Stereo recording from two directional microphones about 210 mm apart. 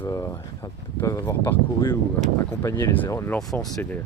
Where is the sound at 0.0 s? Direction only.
15° left (ahead or behind).